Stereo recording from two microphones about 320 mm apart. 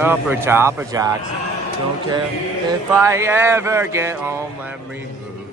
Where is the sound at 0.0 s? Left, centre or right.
Centre.